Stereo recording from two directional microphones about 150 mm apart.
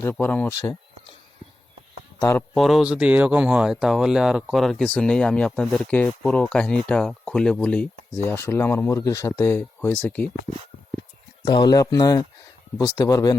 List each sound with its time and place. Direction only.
0.0 s speech: 10° left (ahead or behind)
2.1 s speech: 20° left (ahead or behind)
2.6 s speech: centre (ahead or behind)
11.4 s speech: 25° left (ahead or behind)